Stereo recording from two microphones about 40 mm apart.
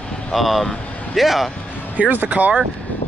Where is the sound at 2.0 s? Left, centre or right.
Right.